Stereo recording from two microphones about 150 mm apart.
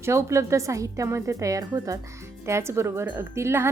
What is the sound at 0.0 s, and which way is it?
Speech, 20° right (ahead or behind).